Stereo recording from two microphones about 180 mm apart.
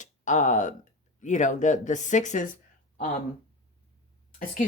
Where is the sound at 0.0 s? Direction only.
40° left (ahead or behind).